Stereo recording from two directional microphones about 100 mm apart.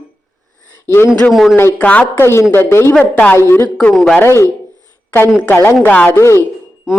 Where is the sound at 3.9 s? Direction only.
Centre (ahead or behind).